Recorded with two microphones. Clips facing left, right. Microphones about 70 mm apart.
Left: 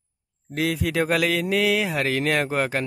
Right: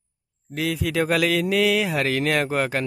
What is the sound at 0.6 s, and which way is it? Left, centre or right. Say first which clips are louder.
Speech: left 1 dB; left.